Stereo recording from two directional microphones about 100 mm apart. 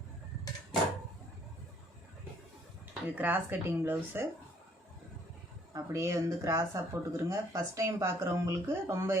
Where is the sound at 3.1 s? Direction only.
20° right (ahead or behind).